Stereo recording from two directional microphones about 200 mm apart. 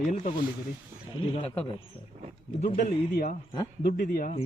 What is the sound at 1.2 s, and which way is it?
Speech, 25° left (ahead or behind).